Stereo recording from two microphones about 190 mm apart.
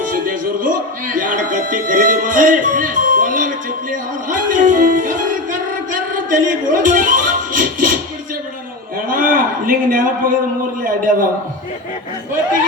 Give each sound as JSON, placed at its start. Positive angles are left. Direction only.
{"t": 0.0, "sound": "speech", "side_deg": -45}
{"t": 4.3, "sound": "music", "side_deg": -45}
{"t": 9.0, "sound": "a man's voice", "side_deg": -45}